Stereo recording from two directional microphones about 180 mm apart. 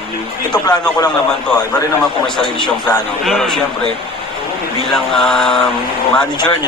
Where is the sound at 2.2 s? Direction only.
5° left (ahead or behind).